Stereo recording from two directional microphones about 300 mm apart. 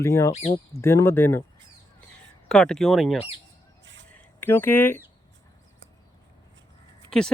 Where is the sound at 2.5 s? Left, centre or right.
Centre.